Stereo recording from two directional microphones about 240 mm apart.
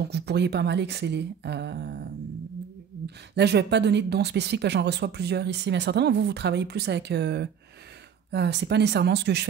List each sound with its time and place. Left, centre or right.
0.1 s speech: right
3.3 s speech: right